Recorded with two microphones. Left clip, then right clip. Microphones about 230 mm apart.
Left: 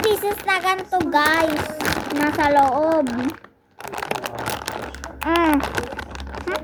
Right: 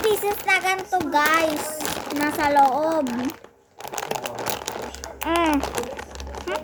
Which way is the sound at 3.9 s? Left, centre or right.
Centre.